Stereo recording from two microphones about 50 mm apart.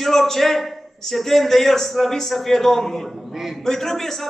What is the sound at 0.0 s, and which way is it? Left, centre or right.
A man's voice, centre.